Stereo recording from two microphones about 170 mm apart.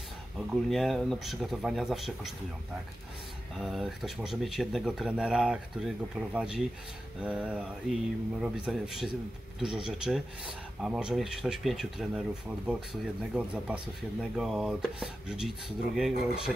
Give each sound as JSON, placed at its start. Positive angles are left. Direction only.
{"t": 0.5, "sound": "speech", "side_deg": 0}
{"t": 3.5, "sound": "speech", "side_deg": 0}